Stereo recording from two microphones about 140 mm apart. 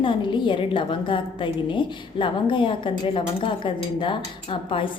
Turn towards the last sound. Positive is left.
turn(degrees=40)  # may be behind; listen again after turning